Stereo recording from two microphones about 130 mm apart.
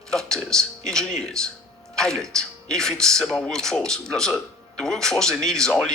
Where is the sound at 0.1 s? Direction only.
5° left (ahead or behind).